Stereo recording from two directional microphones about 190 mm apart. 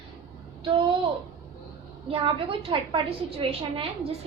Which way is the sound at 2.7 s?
25° right (ahead or behind).